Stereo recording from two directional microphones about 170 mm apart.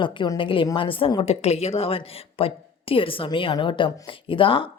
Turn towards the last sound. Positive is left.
turn(degrees=30)  # may be behind; listen again after turning